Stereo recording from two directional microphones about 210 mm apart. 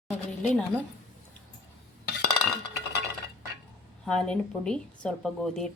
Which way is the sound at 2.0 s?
55° left (ahead or behind).